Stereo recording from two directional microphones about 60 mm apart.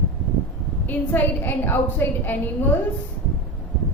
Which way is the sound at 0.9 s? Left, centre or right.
Left.